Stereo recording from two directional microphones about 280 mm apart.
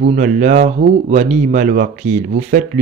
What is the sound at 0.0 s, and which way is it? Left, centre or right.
Speech, right.